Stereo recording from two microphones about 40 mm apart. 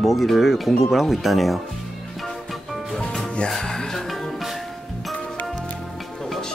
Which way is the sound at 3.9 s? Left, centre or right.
Centre.